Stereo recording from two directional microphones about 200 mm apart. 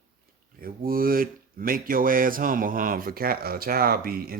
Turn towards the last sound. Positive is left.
turn(degrees=-50)  # may be behind; listen again after turning